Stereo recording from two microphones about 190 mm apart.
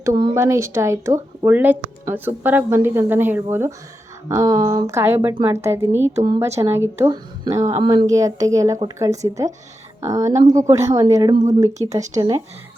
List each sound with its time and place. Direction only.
0.0 s speech: 20° right (ahead or behind)